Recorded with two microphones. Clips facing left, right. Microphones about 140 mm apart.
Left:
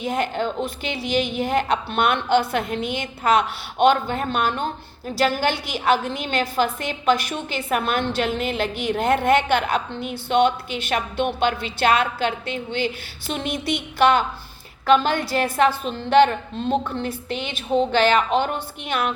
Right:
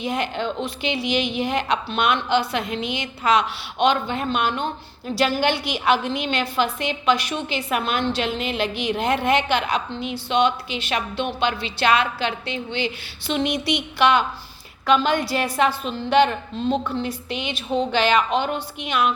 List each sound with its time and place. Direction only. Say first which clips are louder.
0.0 s a woman's voice: left 1 dB; 45° left (ahead or behind)